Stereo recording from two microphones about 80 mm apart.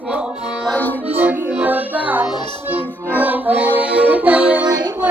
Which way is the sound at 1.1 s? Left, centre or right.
Centre.